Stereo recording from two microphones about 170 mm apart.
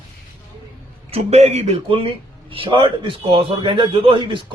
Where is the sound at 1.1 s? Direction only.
40° right (ahead or behind).